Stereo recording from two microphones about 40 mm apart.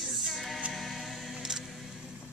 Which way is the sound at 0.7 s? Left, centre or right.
Centre.